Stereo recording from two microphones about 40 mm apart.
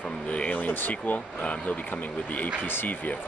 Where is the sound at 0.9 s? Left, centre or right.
Left.